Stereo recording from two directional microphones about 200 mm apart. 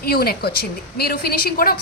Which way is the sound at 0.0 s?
50° left (ahead or behind).